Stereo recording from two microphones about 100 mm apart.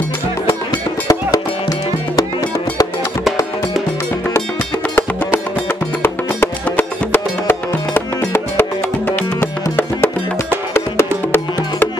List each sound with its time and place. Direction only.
1.0 s music: 35° left (ahead or behind)
6.0 s music: 20° left (ahead or behind)